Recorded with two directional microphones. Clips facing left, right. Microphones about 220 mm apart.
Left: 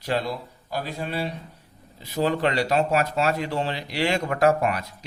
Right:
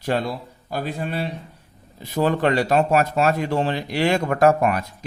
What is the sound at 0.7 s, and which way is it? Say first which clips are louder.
Speech: right 3 dB; 50° right (ahead or behind).